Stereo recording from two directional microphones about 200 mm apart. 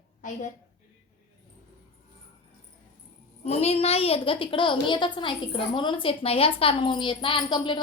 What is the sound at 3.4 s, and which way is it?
A woman's voice, 30° left (ahead or behind).